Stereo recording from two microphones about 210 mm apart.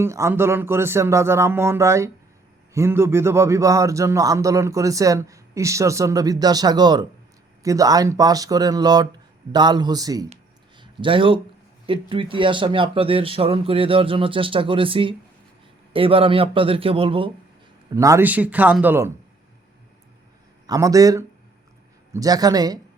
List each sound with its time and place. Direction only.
0.0 s speech: 15° right (ahead or behind)
10.8 s a sound: 25° right (ahead or behind)
11.9 s speech: 25° right (ahead or behind)
17.9 s speech: 15° right (ahead or behind)
20.7 s speech: 15° right (ahead or behind)